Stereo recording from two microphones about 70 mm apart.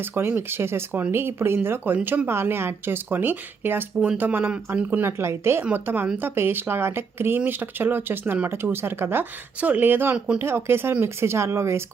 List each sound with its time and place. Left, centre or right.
0.0 s speech: right